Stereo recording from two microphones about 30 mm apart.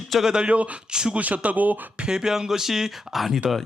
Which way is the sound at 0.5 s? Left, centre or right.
Right.